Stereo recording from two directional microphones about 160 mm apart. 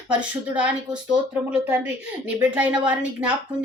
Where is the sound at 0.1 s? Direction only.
10° right (ahead or behind).